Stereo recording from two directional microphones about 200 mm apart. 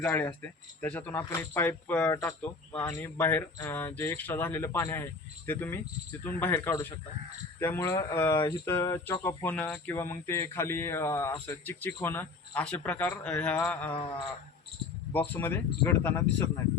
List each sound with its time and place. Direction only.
0.0 s speech: 10° left (ahead or behind)
13.9 s a sound: 25° left (ahead or behind)
15.3 s speech: 10° left (ahead or behind)